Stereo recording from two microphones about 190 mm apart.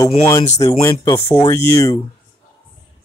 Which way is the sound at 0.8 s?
15° left (ahead or behind).